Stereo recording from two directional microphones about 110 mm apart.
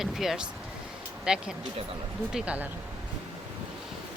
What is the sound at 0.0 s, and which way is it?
Speech, 5° right (ahead or behind).